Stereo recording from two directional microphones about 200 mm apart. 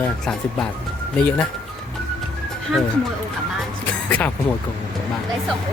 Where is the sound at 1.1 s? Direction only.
5° left (ahead or behind).